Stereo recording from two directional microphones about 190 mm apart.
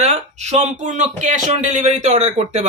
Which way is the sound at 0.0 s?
35° right (ahead or behind).